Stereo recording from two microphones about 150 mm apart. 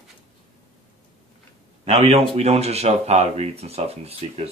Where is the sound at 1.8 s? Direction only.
40° right (ahead or behind).